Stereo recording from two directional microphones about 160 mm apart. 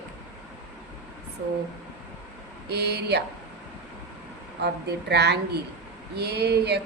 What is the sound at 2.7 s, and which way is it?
Speech, 90° right.